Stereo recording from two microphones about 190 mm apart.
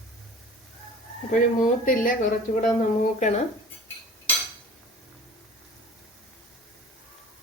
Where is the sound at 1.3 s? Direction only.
45° left (ahead or behind).